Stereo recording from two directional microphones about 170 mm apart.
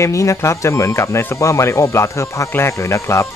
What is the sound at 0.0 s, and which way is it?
Speech, 20° left (ahead or behind).